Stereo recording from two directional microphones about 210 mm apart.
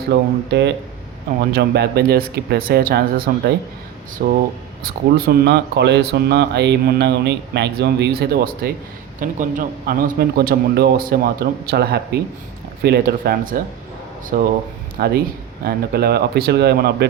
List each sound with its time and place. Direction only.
0.1 s speech: 55° right (ahead or behind)